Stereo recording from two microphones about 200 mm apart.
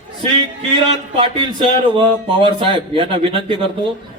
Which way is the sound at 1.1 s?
25° right (ahead or behind).